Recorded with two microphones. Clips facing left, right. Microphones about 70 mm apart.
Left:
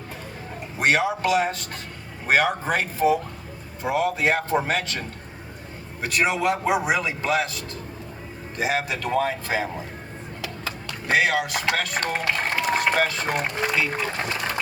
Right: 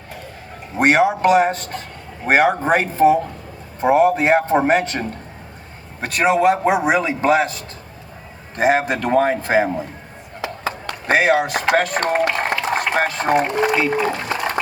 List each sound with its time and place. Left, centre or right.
0.8 s speech: right
10.8 s speech: right